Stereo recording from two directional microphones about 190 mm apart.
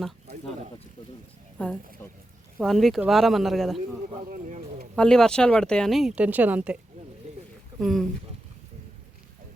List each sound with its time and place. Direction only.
1.5 s speech: 5° left (ahead or behind)
4.3 s a sound: 40° right (ahead or behind)
4.9 s speech: 5° left (ahead or behind)
7.8 s speech: centre (ahead or behind)